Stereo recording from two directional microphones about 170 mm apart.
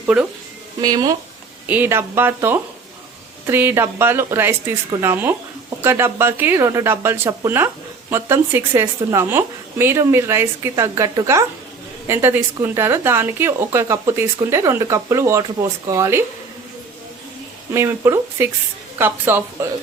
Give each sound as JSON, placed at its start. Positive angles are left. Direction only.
{"t": 0.0, "sound": "speech", "side_deg": -5}
{"t": 0.8, "sound": "speech", "side_deg": -20}
{"t": 1.6, "sound": "a woman's voice", "side_deg": -10}
{"t": 17.7, "sound": "a woman's voice", "side_deg": -15}